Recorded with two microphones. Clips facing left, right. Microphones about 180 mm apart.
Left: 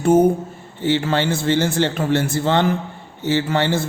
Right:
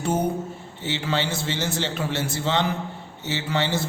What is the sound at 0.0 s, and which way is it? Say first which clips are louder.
A man's voice: left 10 dB; 50° left (ahead or behind).